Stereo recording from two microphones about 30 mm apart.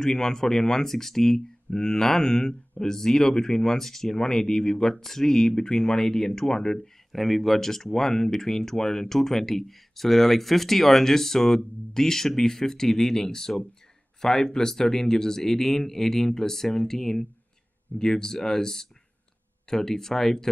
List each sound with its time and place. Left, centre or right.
0.0 s speech: left
5.7 s speech: left
7.1 s speech: centre